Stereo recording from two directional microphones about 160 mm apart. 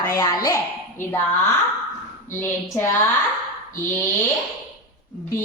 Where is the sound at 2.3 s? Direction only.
15° left (ahead or behind).